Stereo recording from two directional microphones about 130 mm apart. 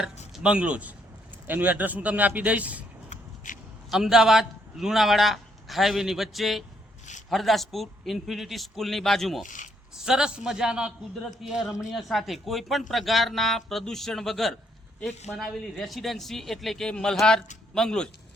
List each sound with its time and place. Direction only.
0.3 s a man's voice: 10° right (ahead or behind)
3.1 s a sound: 90° left
3.9 s a man's voice: 5° right (ahead or behind)
9.4 s speech: 80° left
10.0 s a man's voice: 5° right (ahead or behind)